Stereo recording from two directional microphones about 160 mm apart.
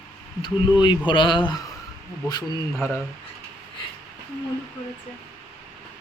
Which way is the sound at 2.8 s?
15° left (ahead or behind).